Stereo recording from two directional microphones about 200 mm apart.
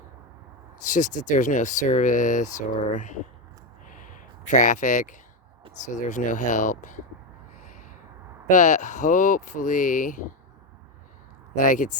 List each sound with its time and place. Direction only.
0.9 s speech: 40° left (ahead or behind)
3.8 s a sound: 40° left (ahead or behind)
5.8 s speech: 40° left (ahead or behind)
7.6 s a sound: 40° left (ahead or behind)
8.4 s speech: 35° left (ahead or behind)
11.5 s speech: 40° left (ahead or behind)